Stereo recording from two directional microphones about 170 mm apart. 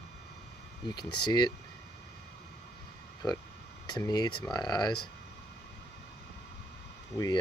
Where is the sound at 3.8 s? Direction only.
25° left (ahead or behind).